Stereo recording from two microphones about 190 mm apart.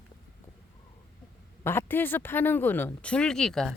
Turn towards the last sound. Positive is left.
turn(degrees=0)  # may be behind; listen again after turning